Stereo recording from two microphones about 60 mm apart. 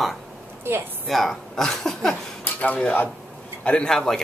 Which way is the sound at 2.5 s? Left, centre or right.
Left.